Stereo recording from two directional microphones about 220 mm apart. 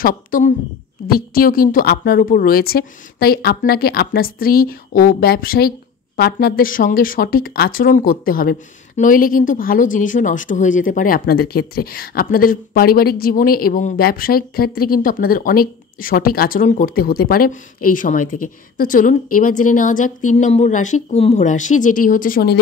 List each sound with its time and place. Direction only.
0.0 s a woman's voice: 40° left (ahead or behind)